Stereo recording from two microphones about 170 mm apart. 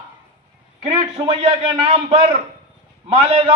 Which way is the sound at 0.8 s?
30° right (ahead or behind).